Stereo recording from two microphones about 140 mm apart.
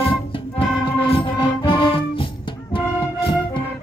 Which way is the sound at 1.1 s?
35° left (ahead or behind).